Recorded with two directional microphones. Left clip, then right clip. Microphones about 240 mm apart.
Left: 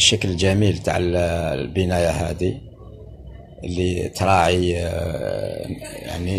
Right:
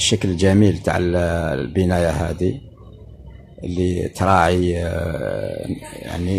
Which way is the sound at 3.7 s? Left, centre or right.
Right.